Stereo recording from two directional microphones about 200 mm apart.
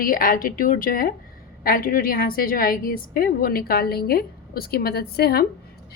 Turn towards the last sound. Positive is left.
turn(degrees=50)  # may be behind; listen again after turning